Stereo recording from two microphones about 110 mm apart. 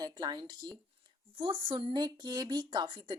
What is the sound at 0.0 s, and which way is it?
A woman's voice, 40° right (ahead or behind).